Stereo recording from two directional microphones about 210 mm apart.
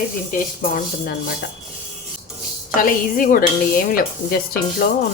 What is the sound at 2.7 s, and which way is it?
Speech, 40° left (ahead or behind).